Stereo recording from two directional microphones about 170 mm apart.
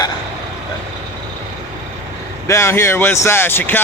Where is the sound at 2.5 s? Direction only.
15° left (ahead or behind).